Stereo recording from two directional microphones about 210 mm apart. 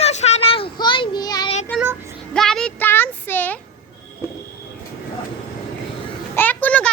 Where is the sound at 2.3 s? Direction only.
Centre (ahead or behind).